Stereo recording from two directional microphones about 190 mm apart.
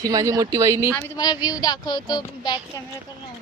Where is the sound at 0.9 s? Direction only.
15° left (ahead or behind).